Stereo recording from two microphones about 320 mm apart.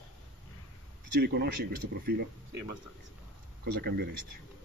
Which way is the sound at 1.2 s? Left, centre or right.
Right.